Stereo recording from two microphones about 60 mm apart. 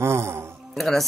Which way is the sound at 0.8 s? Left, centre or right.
Centre.